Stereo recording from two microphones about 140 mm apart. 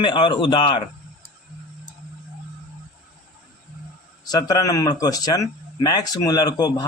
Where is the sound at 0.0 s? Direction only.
35° left (ahead or behind).